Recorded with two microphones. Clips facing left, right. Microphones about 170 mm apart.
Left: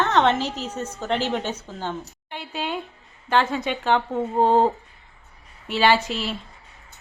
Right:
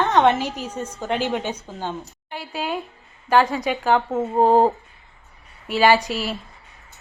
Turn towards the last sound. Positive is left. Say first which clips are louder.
# right 3 dB
turn(degrees=-5)  # may be behind; listen again after turning